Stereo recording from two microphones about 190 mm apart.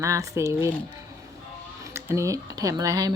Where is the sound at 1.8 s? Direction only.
15° right (ahead or behind).